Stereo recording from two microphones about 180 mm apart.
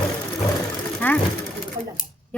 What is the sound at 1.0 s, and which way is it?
Speech, 10° left (ahead or behind).